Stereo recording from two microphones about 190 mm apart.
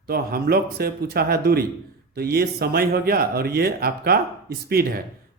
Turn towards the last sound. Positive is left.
turn(degrees=-50)  # may be behind; listen again after turning